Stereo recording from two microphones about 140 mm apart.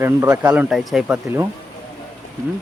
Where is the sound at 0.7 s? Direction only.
Centre (ahead or behind).